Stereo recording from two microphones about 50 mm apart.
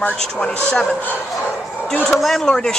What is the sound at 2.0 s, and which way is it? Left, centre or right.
Speech, centre.